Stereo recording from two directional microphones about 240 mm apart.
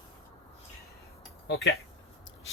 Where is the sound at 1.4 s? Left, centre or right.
Left.